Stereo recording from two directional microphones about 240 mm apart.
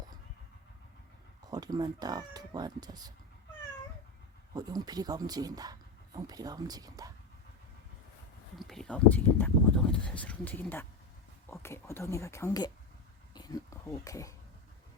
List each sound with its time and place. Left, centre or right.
1.5 s speech: centre
4.5 s speech: centre
8.5 s speech: centre